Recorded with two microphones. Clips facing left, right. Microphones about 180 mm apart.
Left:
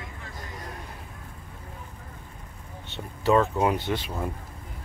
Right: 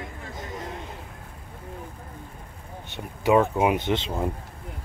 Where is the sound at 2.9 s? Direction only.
15° right (ahead or behind).